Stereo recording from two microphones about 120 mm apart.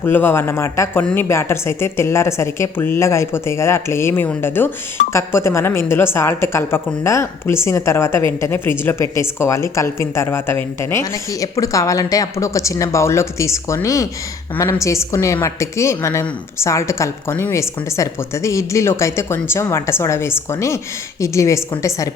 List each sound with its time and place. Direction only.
0.0 s a woman's voice: 15° left (ahead or behind)